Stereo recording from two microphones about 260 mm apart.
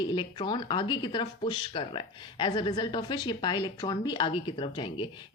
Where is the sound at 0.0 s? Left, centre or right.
Centre.